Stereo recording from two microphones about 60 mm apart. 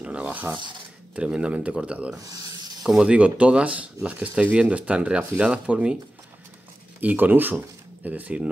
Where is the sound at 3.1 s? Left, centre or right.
Right.